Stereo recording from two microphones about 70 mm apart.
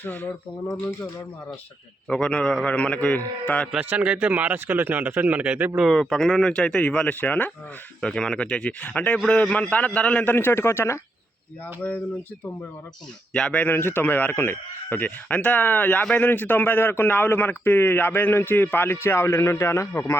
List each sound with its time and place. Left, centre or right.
0.0 s speech: left
2.0 s a man's voice: centre
3.8 s speech: centre
5.9 s a man's voice: centre; by 7.5 s left
8.0 s a man's voice: centre
10.3 s a man's voice: left
13.3 s a man's voice: centre; by 20.1 s left